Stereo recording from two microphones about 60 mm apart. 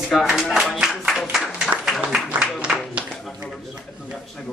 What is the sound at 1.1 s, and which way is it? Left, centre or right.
Applause, centre.